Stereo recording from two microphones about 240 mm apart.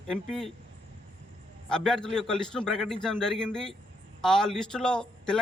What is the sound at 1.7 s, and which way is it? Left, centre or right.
Speech, centre.